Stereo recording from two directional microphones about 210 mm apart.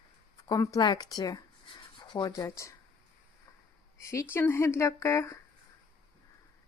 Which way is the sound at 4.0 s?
15° left (ahead or behind).